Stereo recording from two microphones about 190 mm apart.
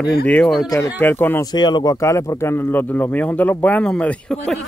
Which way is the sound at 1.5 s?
20° left (ahead or behind).